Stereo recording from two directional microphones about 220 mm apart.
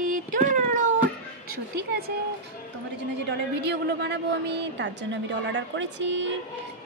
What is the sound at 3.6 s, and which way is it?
A woman's voice, 50° right (ahead or behind).